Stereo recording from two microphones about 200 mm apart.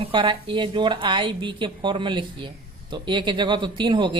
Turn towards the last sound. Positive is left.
turn(degrees=-25)  # may be behind; listen again after turning